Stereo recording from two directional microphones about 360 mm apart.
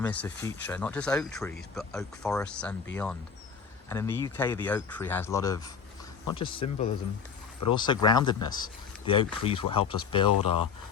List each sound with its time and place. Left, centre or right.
0.0 s speech: centre
10.2 s speech: left